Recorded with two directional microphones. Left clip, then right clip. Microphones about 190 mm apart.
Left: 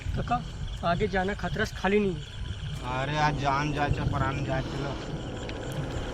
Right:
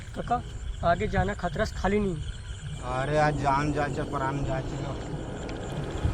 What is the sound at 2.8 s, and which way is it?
Speech, 60° right (ahead or behind).